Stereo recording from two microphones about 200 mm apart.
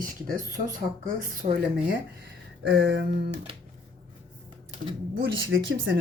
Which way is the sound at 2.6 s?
60° right (ahead or behind).